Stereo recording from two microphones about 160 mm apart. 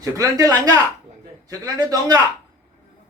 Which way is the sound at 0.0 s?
20° right (ahead or behind).